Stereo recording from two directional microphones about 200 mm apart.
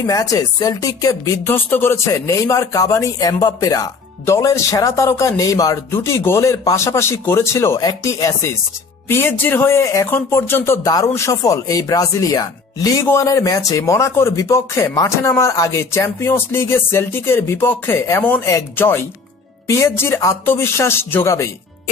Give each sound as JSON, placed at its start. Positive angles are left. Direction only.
{"t": 0.0, "sound": "speech", "side_deg": 15}